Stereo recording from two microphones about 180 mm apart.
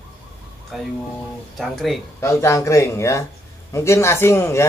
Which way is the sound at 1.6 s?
Centre (ahead or behind).